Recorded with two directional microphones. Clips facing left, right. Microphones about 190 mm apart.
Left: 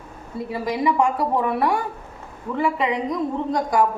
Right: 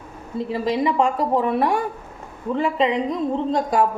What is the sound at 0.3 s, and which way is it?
A woman's voice, 25° right (ahead or behind).